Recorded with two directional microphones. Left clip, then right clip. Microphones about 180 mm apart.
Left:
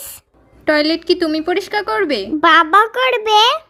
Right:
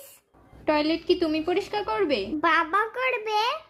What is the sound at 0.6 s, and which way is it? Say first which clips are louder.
A woman's voice: left 9 dB; 20° left (ahead or behind).